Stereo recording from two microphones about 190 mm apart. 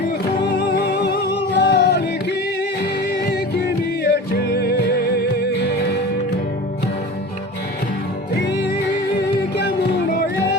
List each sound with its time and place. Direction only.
0.6 s music: 60° left (ahead or behind)
4.0 s music: 60° left (ahead or behind)